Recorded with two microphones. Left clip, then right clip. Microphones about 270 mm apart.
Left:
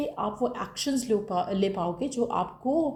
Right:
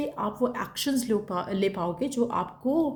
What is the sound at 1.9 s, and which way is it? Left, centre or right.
Speech, right.